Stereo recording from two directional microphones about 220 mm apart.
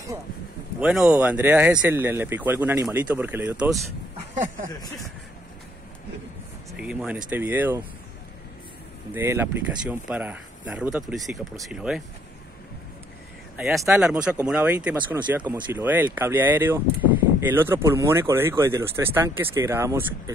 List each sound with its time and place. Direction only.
0.7 s speech: 5° right (ahead or behind)
4.6 s speech: 15° left (ahead or behind)
6.8 s speech: 5° right (ahead or behind)
9.1 s speech: 10° right (ahead or behind)
13.6 s speech: 5° right (ahead or behind)